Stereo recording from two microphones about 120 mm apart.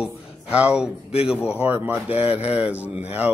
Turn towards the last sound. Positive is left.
turn(degrees=-15)  # may be behind; listen again after turning